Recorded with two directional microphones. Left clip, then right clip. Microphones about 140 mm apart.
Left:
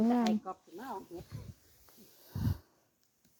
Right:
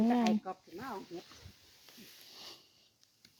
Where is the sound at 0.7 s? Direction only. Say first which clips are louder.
Left 1 dB; 90° right.